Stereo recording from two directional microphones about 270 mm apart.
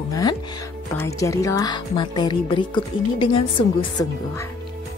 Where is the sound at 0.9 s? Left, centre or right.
Centre.